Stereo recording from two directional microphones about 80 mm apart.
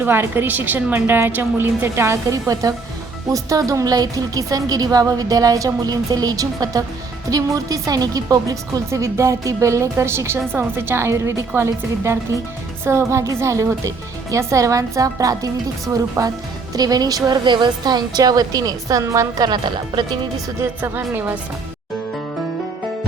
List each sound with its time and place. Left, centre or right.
0.0 s a woman's voice: right
19.5 s speech: right
20.6 s a woman's voice: right